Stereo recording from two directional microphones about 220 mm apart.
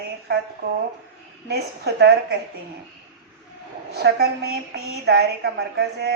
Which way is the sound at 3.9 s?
45° right (ahead or behind).